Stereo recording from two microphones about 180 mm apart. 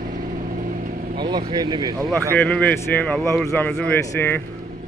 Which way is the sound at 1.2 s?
25° right (ahead or behind).